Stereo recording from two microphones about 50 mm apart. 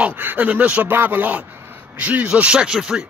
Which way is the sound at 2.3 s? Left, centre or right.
Centre.